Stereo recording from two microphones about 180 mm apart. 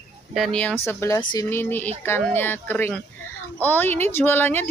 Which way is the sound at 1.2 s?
25° left (ahead or behind).